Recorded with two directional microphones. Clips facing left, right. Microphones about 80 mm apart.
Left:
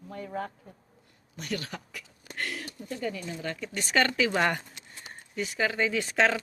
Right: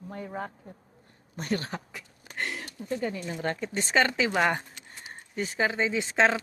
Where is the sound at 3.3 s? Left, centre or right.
Right.